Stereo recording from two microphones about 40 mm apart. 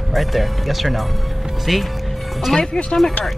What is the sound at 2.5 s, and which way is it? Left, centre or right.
Speech, centre.